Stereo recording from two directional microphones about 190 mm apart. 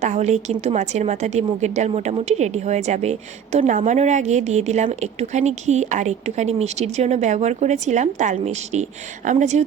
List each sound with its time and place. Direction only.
0.0 s a woman's voice: 35° right (ahead or behind)